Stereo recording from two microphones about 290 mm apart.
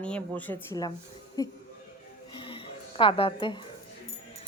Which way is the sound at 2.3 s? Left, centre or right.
Centre.